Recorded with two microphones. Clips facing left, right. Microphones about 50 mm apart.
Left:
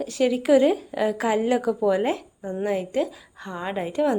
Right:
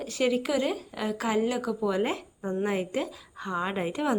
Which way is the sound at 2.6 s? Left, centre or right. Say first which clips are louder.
Left 5 dB; centre.